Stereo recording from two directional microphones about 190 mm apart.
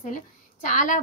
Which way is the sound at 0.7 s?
45° left (ahead or behind).